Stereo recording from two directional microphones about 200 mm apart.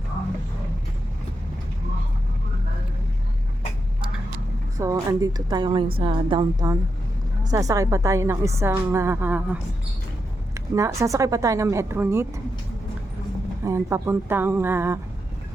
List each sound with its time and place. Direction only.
4.8 s a woman's voice: 15° right (ahead or behind)
13.7 s a woman's voice: 15° right (ahead or behind)